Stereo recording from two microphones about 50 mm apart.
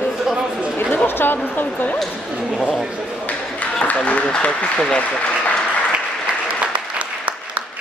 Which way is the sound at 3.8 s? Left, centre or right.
Left.